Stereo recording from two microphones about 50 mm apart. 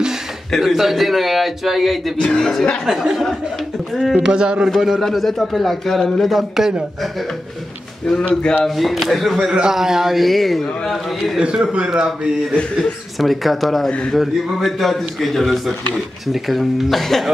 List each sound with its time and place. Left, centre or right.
0.6 s a man's voice: centre
2.1 s speech: centre
2.9 s a man's voice: centre
3.9 s a man's voice: centre
4.3 s a man's voice: centre
4.6 s a man's voice: centre
8.6 s a man's voice: centre
9.4 s a man's voice: centre
11.8 s a man's voice: centre
13.2 s a man's voice: centre